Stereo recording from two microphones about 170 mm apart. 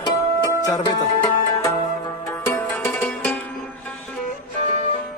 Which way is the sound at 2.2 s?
15° left (ahead or behind).